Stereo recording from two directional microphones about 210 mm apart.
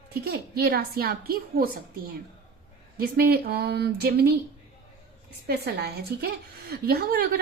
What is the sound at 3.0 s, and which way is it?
A woman's voice, 45° right (ahead or behind).